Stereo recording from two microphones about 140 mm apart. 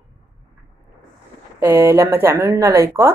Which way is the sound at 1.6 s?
15° right (ahead or behind).